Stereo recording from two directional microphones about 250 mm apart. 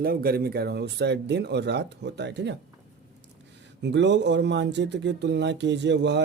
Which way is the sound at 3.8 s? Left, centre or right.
Right.